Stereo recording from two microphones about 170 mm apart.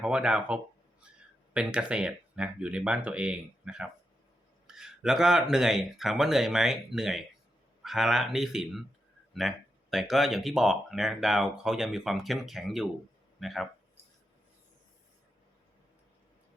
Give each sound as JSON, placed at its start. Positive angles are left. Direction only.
{"t": 0.0, "sound": "speech", "side_deg": -5}